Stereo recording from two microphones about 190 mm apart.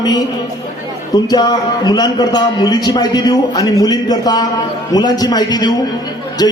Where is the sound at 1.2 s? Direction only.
20° left (ahead or behind).